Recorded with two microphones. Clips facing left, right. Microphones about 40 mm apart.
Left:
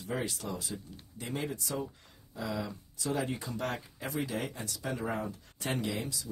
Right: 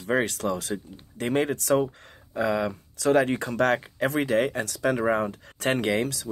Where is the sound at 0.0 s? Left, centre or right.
Right.